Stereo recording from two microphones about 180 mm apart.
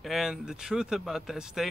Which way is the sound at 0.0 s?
Centre (ahead or behind).